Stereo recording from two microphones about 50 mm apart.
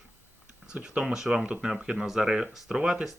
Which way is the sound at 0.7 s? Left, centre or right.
Centre.